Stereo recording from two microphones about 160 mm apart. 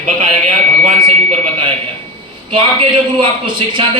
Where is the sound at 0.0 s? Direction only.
50° right (ahead or behind).